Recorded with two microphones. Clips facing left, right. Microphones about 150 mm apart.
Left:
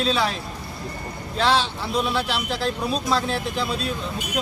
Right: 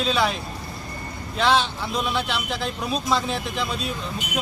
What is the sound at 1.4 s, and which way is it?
Speech, centre (ahead or behind).